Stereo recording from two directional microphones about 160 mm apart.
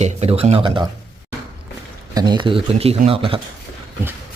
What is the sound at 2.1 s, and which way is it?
Speech, 25° right (ahead or behind).